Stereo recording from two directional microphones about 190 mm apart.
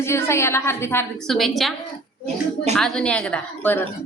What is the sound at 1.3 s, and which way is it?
Speech, centre (ahead or behind).